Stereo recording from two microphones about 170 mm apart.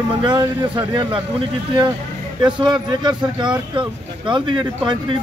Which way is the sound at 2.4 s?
25° right (ahead or behind).